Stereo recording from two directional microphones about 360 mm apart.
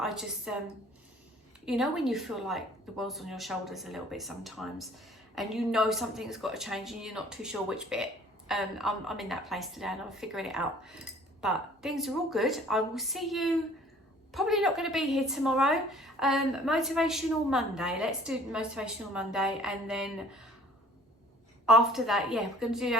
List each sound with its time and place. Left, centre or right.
0.0 s a woman's voice: centre
1.6 s a woman's voice: centre
21.7 s a woman's voice: centre